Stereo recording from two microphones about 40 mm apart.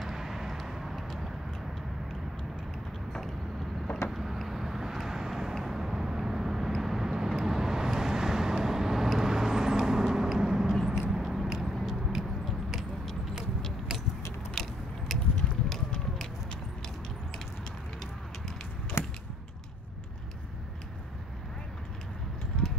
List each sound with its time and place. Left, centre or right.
0.0 s vehicle: centre
4.1 s vehicle: centre
11.0 s biting: centre
11.4 s vehicle: centre
14.5 s biting: centre
15.7 s run: centre
19.0 s a sound: left
22.5 s a sound: centre